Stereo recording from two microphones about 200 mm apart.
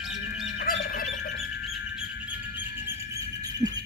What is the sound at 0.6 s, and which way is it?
Fowl, 45° left (ahead or behind).